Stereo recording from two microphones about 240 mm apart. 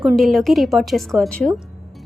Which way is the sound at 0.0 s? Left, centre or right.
Centre.